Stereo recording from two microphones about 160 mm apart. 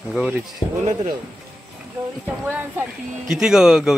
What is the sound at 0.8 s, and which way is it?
Speech, 45° right (ahead or behind).